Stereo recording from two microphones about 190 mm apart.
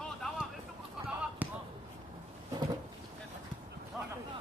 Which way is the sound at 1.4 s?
10° right (ahead or behind).